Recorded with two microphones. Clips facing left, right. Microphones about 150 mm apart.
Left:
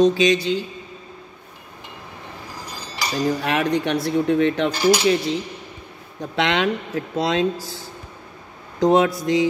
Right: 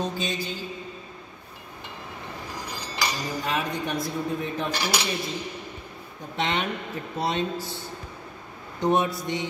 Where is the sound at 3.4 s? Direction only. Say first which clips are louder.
Left 7 dB; 80° left.